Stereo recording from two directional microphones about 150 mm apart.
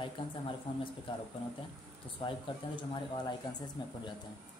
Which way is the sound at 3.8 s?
30° left (ahead or behind).